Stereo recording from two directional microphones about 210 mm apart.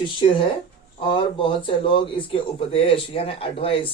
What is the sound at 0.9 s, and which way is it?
A man's voice, 25° left (ahead or behind).